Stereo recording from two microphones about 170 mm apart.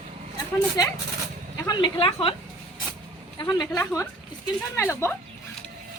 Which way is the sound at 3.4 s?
20° left (ahead or behind).